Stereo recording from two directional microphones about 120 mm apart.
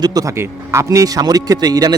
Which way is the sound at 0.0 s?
30° right (ahead or behind).